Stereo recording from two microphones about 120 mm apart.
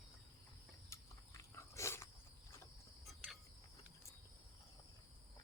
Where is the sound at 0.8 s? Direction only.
25° left (ahead or behind).